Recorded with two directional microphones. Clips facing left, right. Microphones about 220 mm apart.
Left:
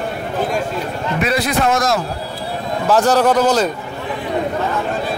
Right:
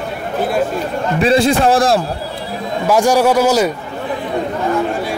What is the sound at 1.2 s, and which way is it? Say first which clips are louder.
Speech: right 6 dB; 30° right (ahead or behind).